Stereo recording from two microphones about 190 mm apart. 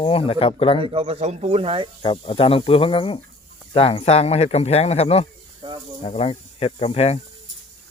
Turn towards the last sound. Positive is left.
turn(degrees=30)  # may be behind; listen again after turning